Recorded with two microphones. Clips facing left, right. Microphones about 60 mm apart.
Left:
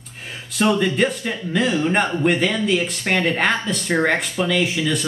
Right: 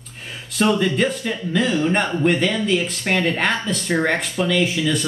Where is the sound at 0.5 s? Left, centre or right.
Centre.